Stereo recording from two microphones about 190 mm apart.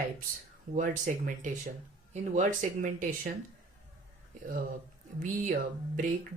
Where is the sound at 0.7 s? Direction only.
45° right (ahead or behind).